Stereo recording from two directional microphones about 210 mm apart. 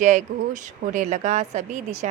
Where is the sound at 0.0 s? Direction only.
35° right (ahead or behind).